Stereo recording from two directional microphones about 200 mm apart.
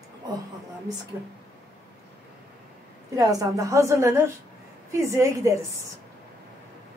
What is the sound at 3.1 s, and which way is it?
A woman's voice, 20° right (ahead or behind).